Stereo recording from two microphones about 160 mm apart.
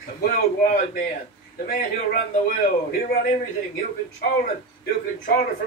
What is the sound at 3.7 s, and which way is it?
Speech, 65° left (ahead or behind).